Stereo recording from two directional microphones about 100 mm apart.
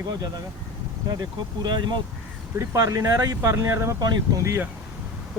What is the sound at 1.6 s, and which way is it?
Speech, 50° right (ahead or behind).